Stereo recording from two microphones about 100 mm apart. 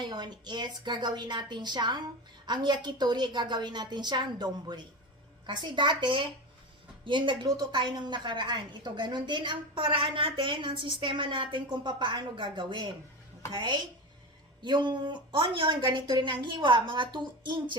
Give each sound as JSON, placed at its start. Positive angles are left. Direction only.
{"t": 0.0, "sound": "a woman's voice", "side_deg": -45}